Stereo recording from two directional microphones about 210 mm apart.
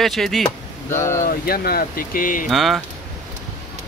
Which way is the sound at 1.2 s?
45° left (ahead or behind).